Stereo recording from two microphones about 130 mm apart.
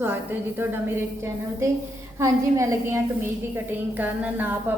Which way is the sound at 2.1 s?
25° right (ahead or behind).